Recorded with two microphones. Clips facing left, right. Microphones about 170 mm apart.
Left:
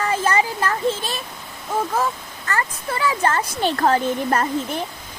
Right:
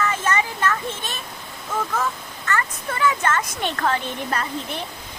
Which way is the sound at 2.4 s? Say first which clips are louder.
Left 1 dB; 35° left (ahead or behind).